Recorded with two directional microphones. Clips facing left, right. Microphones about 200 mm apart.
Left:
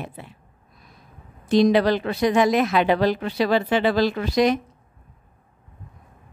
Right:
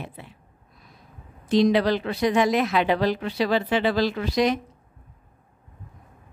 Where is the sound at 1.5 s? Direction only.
50° left (ahead or behind).